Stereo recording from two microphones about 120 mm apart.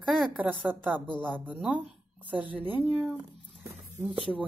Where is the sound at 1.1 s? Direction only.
10° left (ahead or behind).